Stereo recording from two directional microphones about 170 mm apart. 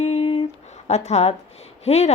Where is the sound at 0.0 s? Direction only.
40° left (ahead or behind).